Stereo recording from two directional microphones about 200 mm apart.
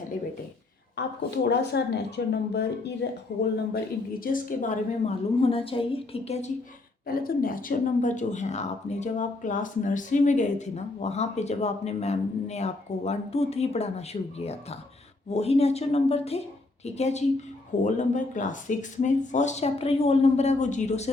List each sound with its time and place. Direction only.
1.5 s speech: 55° left (ahead or behind)
4.2 s speech: 45° left (ahead or behind)
7.1 s speech: 45° left (ahead or behind)